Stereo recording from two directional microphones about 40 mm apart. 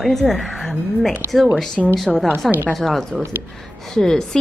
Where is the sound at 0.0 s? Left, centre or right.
Centre.